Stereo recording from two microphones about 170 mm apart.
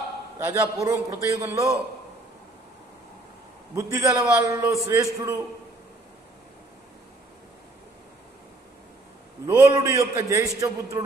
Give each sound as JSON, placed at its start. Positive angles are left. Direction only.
{"t": 0.4, "sound": "a man's voice", "side_deg": -15}
{"t": 3.7, "sound": "a man's voice", "side_deg": -15}
{"t": 9.5, "sound": "a man's voice", "side_deg": -15}